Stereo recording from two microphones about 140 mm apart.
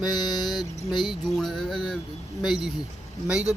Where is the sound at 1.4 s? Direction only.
Centre (ahead or behind).